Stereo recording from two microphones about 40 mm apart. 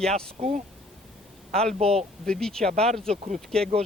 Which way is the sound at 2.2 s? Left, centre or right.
Centre.